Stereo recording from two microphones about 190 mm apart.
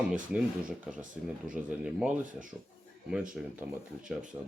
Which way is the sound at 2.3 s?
45° right (ahead or behind).